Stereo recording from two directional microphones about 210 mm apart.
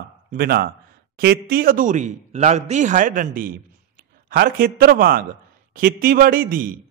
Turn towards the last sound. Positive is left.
turn(degrees=-40)  # may be behind; listen again after turning